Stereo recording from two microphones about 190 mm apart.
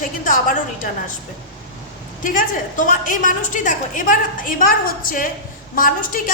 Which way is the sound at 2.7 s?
45° left (ahead or behind).